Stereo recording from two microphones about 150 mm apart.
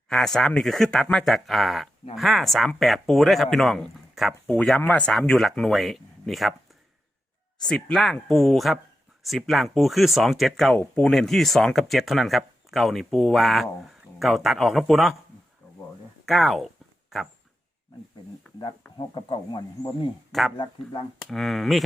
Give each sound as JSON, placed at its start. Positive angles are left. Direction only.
{"t": 0.1, "sound": "speech", "side_deg": 0}
{"t": 7.7, "sound": "speech", "side_deg": 0}
{"t": 10.8, "sound": "speech", "side_deg": 10}
{"t": 16.2, "sound": "speech", "side_deg": 0}
{"t": 18.9, "sound": "speech", "side_deg": 30}
{"t": 20.3, "sound": "speech", "side_deg": 0}